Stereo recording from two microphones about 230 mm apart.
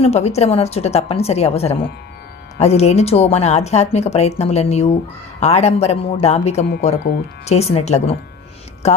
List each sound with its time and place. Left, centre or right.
0.0 s speech: left